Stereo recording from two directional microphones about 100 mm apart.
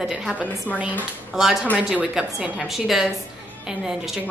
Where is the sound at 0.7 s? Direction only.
20° left (ahead or behind).